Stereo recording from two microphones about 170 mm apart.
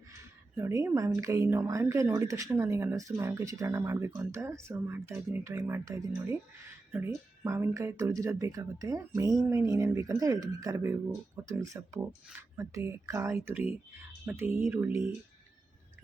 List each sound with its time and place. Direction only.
0.5 s speech: 15° right (ahead or behind)